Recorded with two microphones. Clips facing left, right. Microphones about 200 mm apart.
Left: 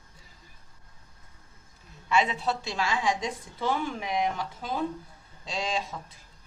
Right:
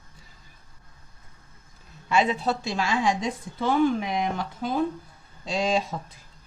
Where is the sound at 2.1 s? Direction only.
40° right (ahead or behind).